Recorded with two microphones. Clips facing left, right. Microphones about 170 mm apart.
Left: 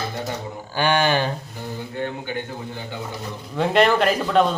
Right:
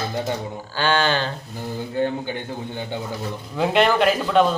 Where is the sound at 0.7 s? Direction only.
15° left (ahead or behind).